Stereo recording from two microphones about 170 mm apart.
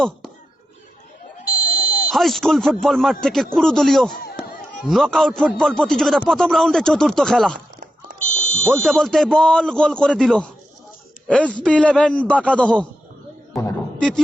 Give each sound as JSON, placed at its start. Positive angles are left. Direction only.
{"t": 1.5, "sound": "buzzer", "side_deg": 60}
{"t": 2.0, "sound": "speech", "side_deg": 0}
{"t": 8.3, "sound": "smoke detector", "side_deg": 45}
{"t": 8.6, "sound": "speech", "side_deg": 5}